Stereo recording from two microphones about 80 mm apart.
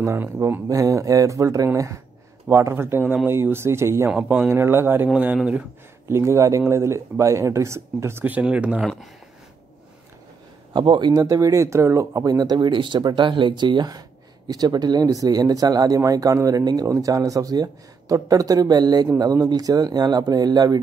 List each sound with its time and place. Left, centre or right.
0.0 s speech: right
0.7 s speech: right
2.5 s speech: right
4.1 s speech: centre
4.5 s speech: right
5.1 s speech: centre
6.0 s speech: right; by 8.8 s centre
10.7 s a man's voice: right
11.1 s speech: right